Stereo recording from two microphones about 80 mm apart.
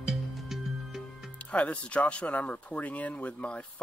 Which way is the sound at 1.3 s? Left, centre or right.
Centre.